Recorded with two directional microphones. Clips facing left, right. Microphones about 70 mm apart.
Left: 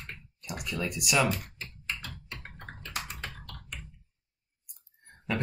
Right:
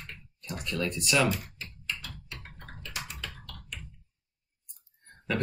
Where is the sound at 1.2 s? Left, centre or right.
Left.